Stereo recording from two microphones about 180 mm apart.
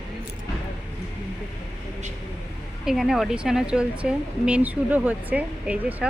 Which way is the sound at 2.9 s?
Centre (ahead or behind).